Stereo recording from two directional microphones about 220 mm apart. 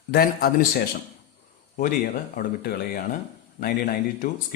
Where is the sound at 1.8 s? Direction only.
40° left (ahead or behind).